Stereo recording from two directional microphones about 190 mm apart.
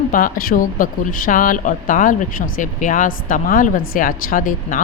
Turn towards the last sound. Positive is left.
turn(degrees=45)  # may be behind; listen again after turning